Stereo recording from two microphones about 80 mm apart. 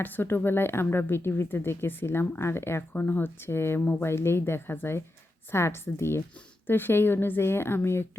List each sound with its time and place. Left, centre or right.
0.0 s a woman's voice: left